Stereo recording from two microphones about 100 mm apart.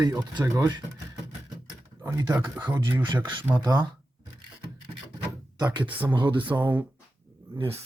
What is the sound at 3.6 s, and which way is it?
Speech, 40° right (ahead or behind).